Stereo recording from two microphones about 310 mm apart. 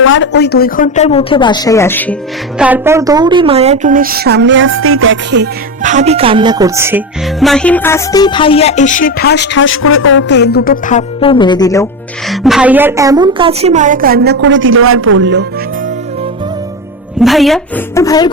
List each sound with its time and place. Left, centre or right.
0.0 s a woman's voice: left; by 2.1 s centre
2.6 s a woman's voice: centre
12.3 s a woman's voice: centre; by 15.4 s right
17.2 s a woman's voice: centre